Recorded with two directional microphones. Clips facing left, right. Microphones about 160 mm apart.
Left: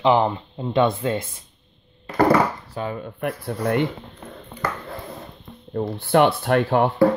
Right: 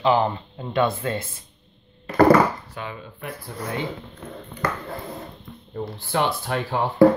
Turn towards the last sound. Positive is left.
turn(degrees=60)  # may be behind; listen again after turning